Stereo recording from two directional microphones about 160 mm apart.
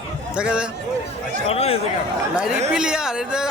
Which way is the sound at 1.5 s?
40° left (ahead or behind).